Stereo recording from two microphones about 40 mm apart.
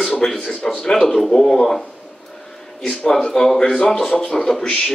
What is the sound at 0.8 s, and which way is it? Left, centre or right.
Speech, centre.